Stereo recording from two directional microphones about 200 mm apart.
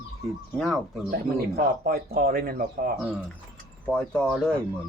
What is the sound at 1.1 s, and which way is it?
Speech, 45° right (ahead or behind).